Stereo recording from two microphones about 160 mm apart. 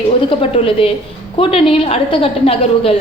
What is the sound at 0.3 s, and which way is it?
A woman's voice, 35° left (ahead or behind).